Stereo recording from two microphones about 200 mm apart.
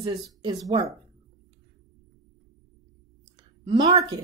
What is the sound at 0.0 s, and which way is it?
Speech, 20° right (ahead or behind).